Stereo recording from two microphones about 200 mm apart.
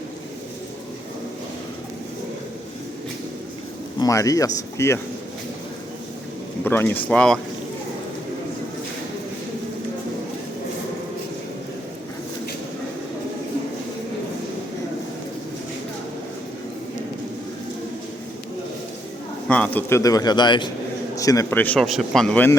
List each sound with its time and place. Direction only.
4.0 s speech: 15° left (ahead or behind)
6.7 s speech: 10° left (ahead or behind)
19.5 s speech: 5° left (ahead or behind)